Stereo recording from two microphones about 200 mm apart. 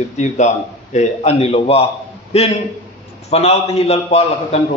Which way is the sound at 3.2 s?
30° left (ahead or behind).